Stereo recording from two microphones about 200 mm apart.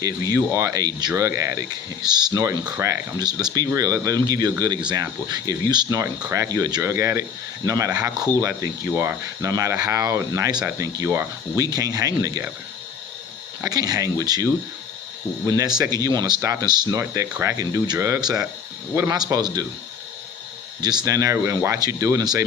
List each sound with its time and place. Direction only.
0.0 s speech: 15° right (ahead or behind)
13.6 s speech: 20° right (ahead or behind)
20.8 s speech: 20° right (ahead or behind)